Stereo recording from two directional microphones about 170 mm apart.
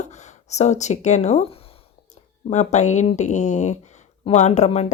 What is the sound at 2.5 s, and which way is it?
Speech, 45° left (ahead or behind).